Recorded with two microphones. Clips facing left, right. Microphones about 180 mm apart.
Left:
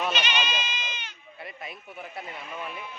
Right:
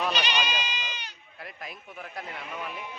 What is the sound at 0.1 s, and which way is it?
Goat, 35° right (ahead or behind).